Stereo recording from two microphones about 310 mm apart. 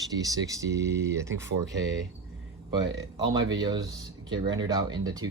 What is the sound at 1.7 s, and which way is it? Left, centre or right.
Speech, right.